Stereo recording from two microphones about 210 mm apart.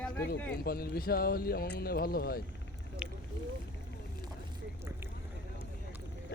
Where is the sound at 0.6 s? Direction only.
45° left (ahead or behind).